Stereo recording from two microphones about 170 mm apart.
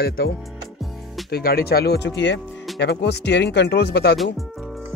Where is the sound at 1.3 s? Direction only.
65° left (ahead or behind); by 2.4 s 90° left.